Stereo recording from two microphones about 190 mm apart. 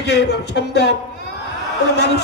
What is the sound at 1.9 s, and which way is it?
Speech, 65° left (ahead or behind).